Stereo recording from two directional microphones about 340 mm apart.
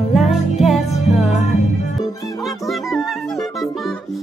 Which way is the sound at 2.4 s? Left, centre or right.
Centre.